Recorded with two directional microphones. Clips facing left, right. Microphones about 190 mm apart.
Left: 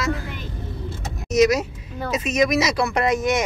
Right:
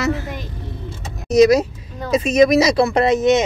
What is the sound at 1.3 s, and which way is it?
Speech, 35° right (ahead or behind).